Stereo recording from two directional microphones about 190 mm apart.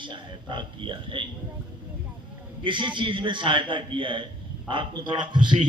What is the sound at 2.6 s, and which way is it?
A man's voice, 25° right (ahead or behind).